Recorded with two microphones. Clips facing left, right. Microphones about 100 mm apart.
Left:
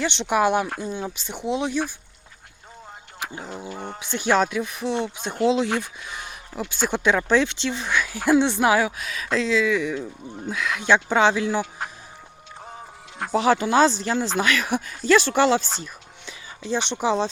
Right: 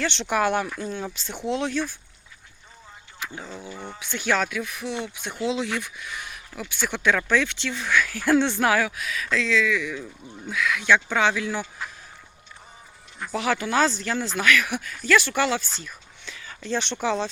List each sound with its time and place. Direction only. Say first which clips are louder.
0.0 s speech: left 3 dB; 20° left (ahead or behind)
3.8 s speech: left 4 dB; 45° left (ahead or behind)
4.0 s speech: left 4 dB; 25° left (ahead or behind)
12.6 s a sound: left 9 dB; 70° left (ahead or behind)
13.3 s speech: left 5 dB; 25° left (ahead or behind)
15.8 s a sound: left 3 dB; 15° left (ahead or behind)
16.6 s speech: left 2 dB; 15° left (ahead or behind)